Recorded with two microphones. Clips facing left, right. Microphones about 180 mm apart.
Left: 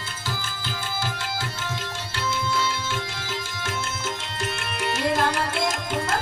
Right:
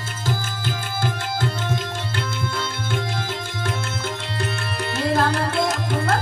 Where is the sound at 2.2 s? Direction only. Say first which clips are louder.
Left 3 dB; 55° right (ahead or behind).